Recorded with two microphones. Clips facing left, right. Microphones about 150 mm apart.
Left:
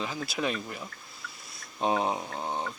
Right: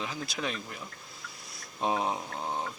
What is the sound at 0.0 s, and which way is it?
Speech, centre (ahead or behind).